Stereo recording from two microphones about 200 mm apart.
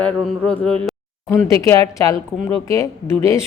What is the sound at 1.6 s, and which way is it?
Speech, 15° left (ahead or behind).